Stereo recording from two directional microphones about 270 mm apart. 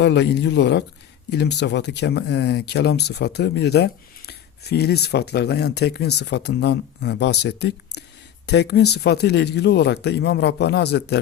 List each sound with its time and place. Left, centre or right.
0.0 s speech: left